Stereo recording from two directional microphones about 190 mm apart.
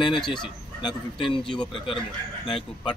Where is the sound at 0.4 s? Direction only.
25° left (ahead or behind).